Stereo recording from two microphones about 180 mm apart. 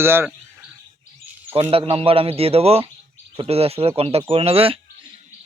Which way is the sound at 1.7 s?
30° right (ahead or behind).